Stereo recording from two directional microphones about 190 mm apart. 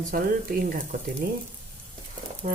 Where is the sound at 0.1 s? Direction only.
50° right (ahead or behind).